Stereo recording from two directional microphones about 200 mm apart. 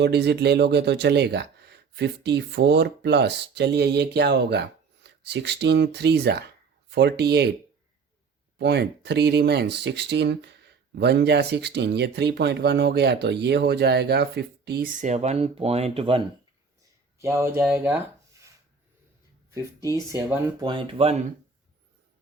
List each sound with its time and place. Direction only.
0.0 s speech: 55° right (ahead or behind)
8.5 s speech: 55° right (ahead or behind); by 16.2 s 30° right (ahead or behind)
17.2 s speech: 15° right (ahead or behind)
19.5 s speech: 15° right (ahead or behind)